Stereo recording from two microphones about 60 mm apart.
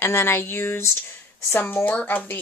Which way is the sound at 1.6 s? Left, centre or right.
Left.